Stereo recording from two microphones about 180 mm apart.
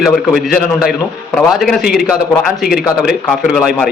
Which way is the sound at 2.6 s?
60° left (ahead or behind).